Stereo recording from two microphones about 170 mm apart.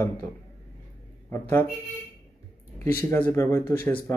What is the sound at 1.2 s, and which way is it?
Speech, 15° left (ahead or behind).